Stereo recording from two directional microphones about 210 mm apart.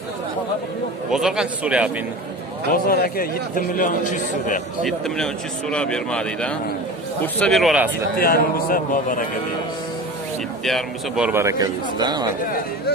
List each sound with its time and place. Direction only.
1.1 s speech: centre (ahead or behind)
2.7 s a man's voice: 45° left (ahead or behind)
4.8 s speech: centre (ahead or behind)
8.2 s a man's voice: 45° left (ahead or behind)
10.6 s a man's voice: centre (ahead or behind); by 12.3 s 20° right (ahead or behind)